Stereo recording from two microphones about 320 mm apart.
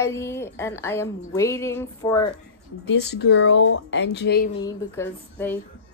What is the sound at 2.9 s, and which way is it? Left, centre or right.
Speech, left.